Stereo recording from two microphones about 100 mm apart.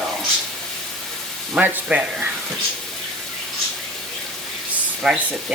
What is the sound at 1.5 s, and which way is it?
Speech, 15° right (ahead or behind).